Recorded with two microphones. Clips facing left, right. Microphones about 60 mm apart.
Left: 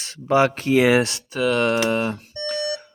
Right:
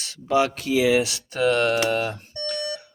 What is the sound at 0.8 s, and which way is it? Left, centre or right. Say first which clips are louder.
Speech: left 2 dB; left.